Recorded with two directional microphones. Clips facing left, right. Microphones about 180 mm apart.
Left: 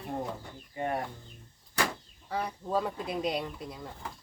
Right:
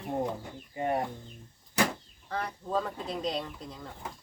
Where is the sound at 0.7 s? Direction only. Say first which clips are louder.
Right 2 dB; 20° right (ahead or behind).